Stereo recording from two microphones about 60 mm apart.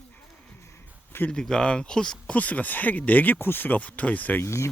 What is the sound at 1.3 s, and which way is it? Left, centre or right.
Speech, centre.